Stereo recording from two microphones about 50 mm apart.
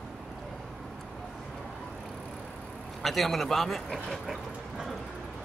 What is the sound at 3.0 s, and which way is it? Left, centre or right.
A man's voice, centre.